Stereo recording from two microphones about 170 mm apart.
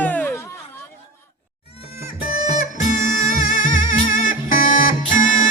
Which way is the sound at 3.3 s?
50° left (ahead or behind).